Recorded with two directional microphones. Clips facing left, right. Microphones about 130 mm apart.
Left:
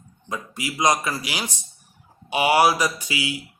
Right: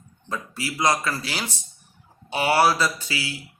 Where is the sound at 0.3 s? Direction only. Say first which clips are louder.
Even; 15° left (ahead or behind).